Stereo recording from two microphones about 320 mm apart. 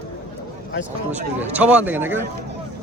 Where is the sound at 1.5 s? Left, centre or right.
Centre.